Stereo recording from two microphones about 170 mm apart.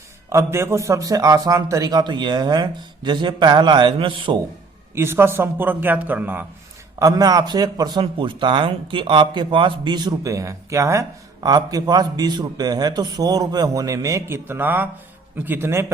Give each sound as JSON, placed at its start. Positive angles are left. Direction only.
{"t": 0.3, "sound": "speech", "side_deg": -15}
{"t": 4.9, "sound": "a man's voice", "side_deg": -15}
{"t": 7.0, "sound": "a man's voice", "side_deg": -20}